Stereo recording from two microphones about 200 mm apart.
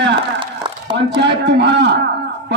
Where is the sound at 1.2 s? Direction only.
60° right (ahead or behind).